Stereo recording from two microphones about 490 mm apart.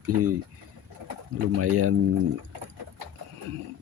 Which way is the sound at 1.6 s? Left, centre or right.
Right.